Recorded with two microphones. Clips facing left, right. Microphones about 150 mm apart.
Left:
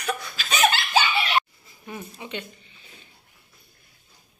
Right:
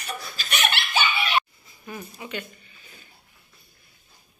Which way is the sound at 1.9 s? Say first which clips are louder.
Even; 25° left (ahead or behind).